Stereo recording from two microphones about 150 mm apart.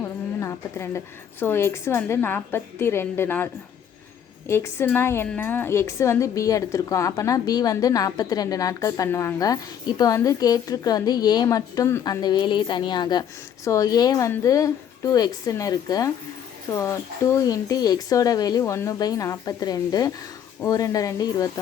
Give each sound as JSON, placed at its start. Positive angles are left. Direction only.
{"t": 0.3, "sound": "a woman's voice", "side_deg": 20}